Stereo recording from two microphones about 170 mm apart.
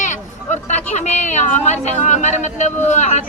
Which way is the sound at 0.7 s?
40° left (ahead or behind).